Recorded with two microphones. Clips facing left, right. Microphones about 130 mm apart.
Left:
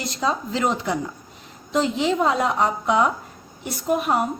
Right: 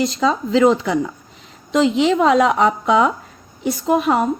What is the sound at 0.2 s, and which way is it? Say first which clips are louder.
Speech: right 4 dB; 90° right.